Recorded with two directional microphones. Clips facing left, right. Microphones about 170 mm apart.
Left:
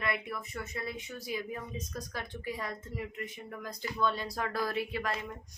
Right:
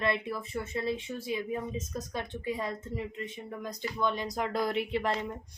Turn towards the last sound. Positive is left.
turn(degrees=-25)  # may be behind; listen again after turning